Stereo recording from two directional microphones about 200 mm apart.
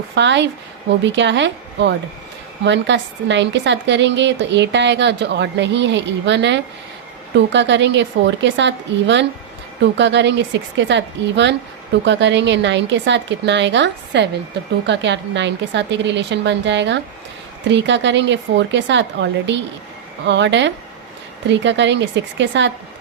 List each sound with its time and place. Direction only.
0.1 s a woman's voice: 60° right (ahead or behind)